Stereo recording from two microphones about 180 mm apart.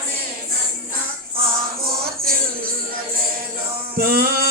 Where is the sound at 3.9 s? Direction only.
55° right (ahead or behind).